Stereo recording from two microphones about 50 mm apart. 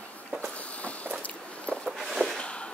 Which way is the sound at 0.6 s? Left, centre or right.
Left.